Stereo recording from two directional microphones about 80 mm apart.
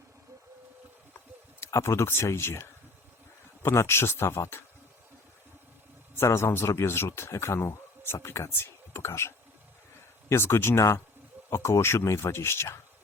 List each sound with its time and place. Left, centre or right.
1.6 s speech: left
6.1 s speech: left